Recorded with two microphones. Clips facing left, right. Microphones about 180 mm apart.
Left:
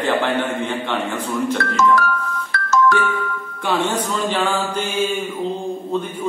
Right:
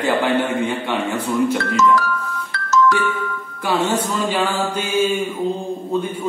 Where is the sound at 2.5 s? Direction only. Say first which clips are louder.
Even; 55° left (ahead or behind).